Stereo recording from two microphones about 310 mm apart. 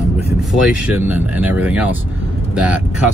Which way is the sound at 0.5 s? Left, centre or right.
Centre.